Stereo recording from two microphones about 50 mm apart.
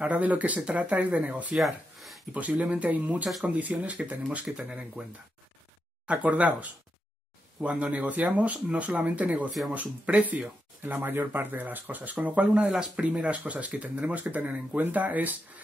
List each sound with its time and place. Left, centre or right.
0.0 s speech: right
1.6 s a sound: centre
2.3 s speech: right
6.0 s speech: right